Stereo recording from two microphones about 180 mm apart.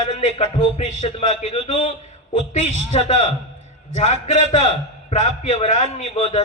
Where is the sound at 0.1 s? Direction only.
35° left (ahead or behind).